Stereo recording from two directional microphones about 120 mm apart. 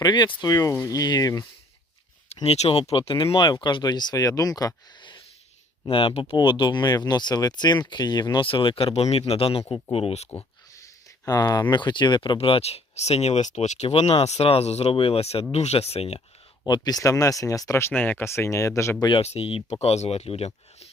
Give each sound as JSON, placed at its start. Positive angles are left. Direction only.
{"t": 0.0, "sound": "speech", "side_deg": 40}
{"t": 2.3, "sound": "speech", "side_deg": 60}
{"t": 11.3, "sound": "speech", "side_deg": 35}
{"t": 12.4, "sound": "speech", "side_deg": 55}
{"t": 16.6, "sound": "speech", "side_deg": 35}
{"t": 19.2, "sound": "speech", "side_deg": 55}